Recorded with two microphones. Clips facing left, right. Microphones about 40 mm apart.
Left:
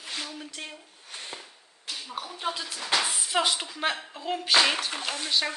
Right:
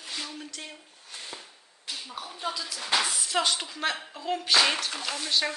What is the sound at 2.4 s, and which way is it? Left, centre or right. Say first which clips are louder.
Speech: left 1 dB; left.